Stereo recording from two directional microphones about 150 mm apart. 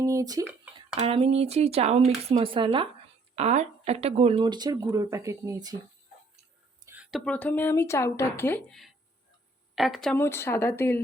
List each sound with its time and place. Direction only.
0.0 s speech: 20° right (ahead or behind)
0.9 s speech: 40° right (ahead or behind)
3.3 s speech: 50° right (ahead or behind); by 5.7 s 25° right (ahead or behind)
6.8 s a sound: 10° right (ahead or behind)
7.1 s speech: 10° left (ahead or behind)
9.7 s speech: centre (ahead or behind)
10.2 s speech: 15° left (ahead or behind)